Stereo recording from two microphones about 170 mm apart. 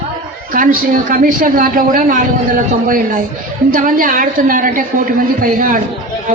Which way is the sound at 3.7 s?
55° right (ahead or behind).